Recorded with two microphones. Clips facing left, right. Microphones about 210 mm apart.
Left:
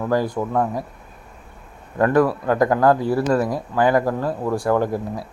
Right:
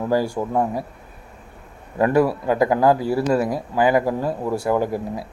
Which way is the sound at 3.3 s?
25° right (ahead or behind).